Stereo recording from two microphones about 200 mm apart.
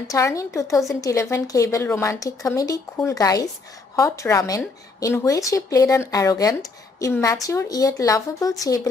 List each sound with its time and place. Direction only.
0.0 s speech: 15° left (ahead or behind)